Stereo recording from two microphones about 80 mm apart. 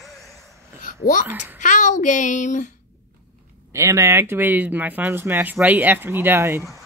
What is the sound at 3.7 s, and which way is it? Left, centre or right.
Speech, right.